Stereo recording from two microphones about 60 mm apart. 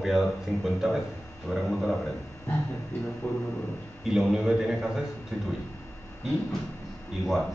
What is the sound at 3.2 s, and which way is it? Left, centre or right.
Speech, left.